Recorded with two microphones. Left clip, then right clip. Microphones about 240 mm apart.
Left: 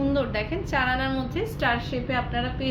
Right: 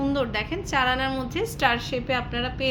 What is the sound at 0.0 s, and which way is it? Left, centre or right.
A woman's voice, right.